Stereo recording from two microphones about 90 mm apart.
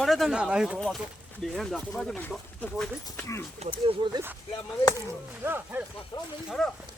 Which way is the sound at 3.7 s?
80° right.